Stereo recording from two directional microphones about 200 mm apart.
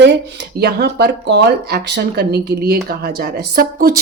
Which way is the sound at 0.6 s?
55° right (ahead or behind).